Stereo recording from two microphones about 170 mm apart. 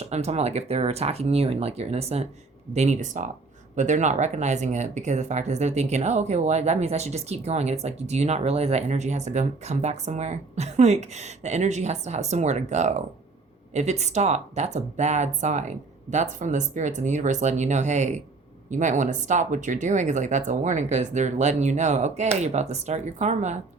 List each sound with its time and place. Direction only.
0.0 s speech: 40° right (ahead or behind)